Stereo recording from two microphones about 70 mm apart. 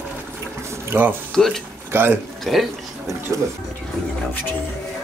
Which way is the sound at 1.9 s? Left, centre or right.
Right.